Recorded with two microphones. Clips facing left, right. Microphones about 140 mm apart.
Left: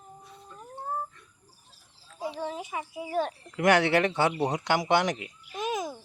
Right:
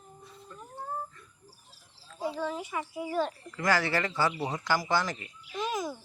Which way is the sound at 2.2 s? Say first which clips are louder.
Right 1 dB; 20° left (ahead or behind).